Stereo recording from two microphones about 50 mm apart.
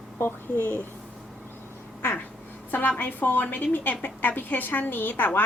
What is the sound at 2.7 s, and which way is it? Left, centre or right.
A woman's voice, left.